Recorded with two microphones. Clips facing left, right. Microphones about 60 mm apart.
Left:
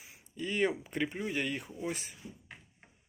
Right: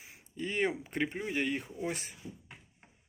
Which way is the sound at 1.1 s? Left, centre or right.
Right.